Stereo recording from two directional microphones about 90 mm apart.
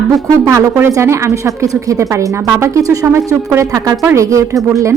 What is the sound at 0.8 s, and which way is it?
A woman's voice, 30° right (ahead or behind).